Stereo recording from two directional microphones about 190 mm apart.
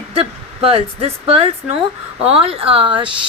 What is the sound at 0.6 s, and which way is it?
Speech, 30° right (ahead or behind).